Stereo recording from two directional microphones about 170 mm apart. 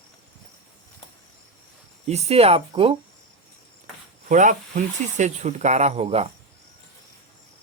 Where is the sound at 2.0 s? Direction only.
40° right (ahead or behind).